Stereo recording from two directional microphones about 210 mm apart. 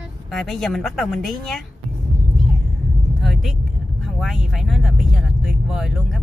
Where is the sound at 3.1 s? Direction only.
Centre (ahead or behind).